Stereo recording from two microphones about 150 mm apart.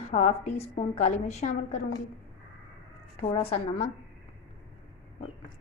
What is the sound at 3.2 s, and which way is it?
Speech, 40° left (ahead or behind).